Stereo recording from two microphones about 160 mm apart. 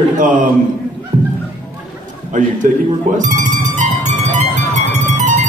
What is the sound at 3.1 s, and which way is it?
Music, 50° right (ahead or behind).